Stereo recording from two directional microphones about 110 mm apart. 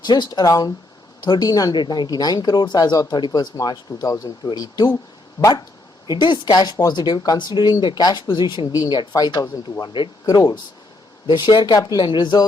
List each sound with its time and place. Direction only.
0.0 s speech: 40° left (ahead or behind)